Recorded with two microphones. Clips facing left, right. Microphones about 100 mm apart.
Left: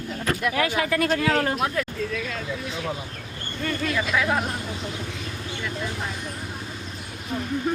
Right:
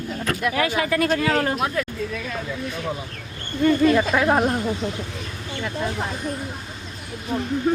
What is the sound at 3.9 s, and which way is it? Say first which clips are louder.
Speech: right 6 dB; 45° right (ahead or behind).